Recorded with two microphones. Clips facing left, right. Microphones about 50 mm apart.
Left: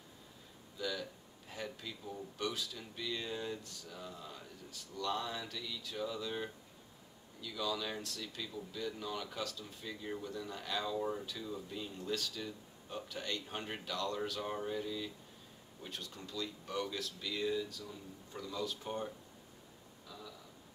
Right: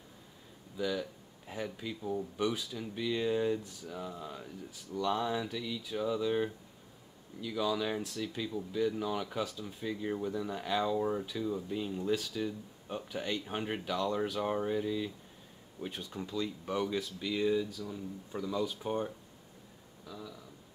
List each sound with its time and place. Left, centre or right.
0.7 s a man's voice: centre